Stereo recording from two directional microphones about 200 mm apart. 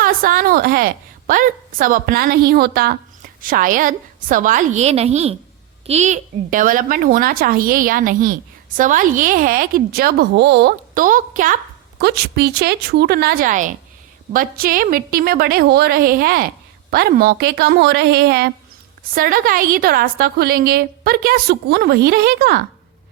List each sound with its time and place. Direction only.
0.0 s a woman's voice: 45° right (ahead or behind)
11.9 s speech: 55° right (ahead or behind)